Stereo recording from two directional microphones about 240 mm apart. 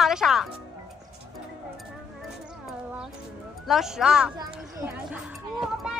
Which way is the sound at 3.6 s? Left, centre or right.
Centre.